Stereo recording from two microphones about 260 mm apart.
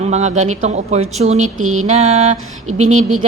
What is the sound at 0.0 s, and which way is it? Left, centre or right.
A woman's voice, right.